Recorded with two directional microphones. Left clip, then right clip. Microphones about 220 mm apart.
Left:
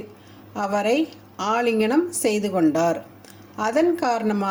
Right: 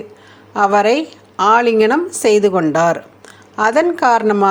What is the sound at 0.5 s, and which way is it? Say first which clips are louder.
A woman's voice: right 9 dB; 15° right (ahead or behind).